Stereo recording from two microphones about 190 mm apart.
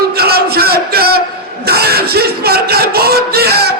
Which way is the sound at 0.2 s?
55° right (ahead or behind).